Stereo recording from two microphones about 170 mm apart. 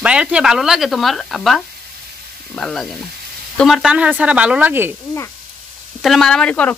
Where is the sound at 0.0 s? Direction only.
5° right (ahead or behind).